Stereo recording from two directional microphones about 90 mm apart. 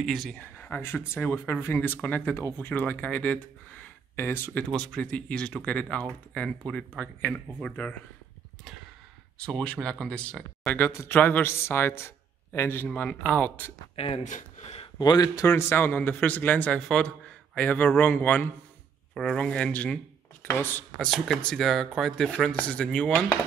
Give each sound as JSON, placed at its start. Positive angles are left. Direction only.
{"t": 0.0, "sound": "speech", "side_deg": 0}
{"t": 0.4, "sound": "speech", "side_deg": 20}
{"t": 3.8, "sound": "a sound", "side_deg": 25}
{"t": 4.7, "sound": "speech", "side_deg": 10}
{"t": 9.4, "sound": "speech", "side_deg": 10}
{"t": 13.1, "sound": "speech", "side_deg": 15}
{"t": 14.0, "sound": "speech", "side_deg": 90}
{"t": 15.0, "sound": "speech", "side_deg": 45}
{"t": 19.1, "sound": "speech", "side_deg": 5}
{"t": 21.0, "sound": "speech", "side_deg": 5}